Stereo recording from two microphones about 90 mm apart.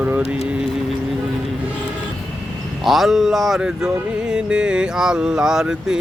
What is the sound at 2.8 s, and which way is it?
Speech, centre (ahead or behind).